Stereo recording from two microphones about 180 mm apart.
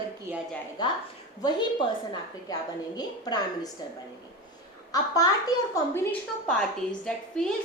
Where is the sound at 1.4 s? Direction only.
25° left (ahead or behind).